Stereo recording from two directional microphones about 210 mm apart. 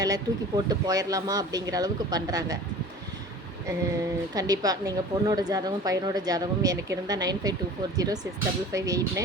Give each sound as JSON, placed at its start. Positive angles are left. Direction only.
{"t": 0.0, "sound": "a woman's voice", "side_deg": -20}
{"t": 4.4, "sound": "a woman's voice", "side_deg": -15}